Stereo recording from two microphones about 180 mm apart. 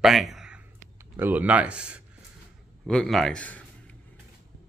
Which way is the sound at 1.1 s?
10° right (ahead or behind).